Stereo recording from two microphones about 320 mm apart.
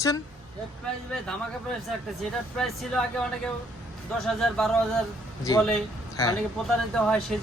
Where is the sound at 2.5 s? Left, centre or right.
Centre.